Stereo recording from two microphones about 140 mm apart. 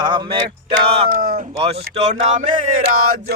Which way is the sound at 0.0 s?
35° right (ahead or behind).